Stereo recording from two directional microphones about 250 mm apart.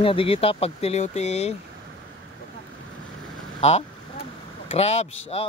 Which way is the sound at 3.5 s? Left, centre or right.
Left.